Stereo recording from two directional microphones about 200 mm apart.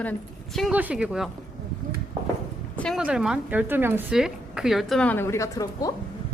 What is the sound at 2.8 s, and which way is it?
Speech, centre (ahead or behind).